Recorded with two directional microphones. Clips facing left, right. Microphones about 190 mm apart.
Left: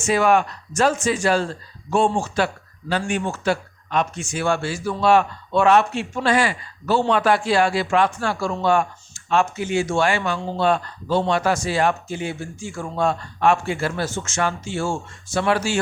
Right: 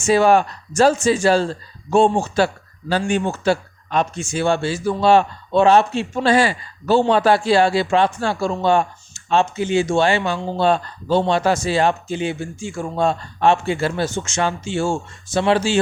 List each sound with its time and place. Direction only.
0.1 s speech: 30° right (ahead or behind)